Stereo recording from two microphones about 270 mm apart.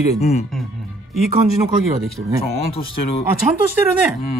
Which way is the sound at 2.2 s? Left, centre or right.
Right.